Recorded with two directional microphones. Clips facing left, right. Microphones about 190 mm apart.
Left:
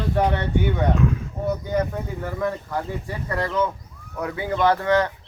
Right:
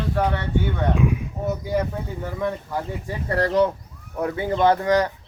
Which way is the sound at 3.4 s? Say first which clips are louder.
Right 5 dB; 40° right (ahead or behind).